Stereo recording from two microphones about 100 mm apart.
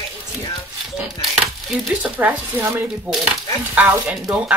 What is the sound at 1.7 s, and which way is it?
Speech, 5° right (ahead or behind).